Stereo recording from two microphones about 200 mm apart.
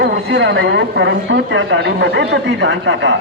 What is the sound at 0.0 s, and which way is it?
A man's voice, 60° right (ahead or behind).